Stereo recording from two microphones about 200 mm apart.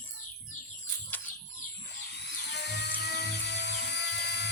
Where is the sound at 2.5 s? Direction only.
55° left (ahead or behind).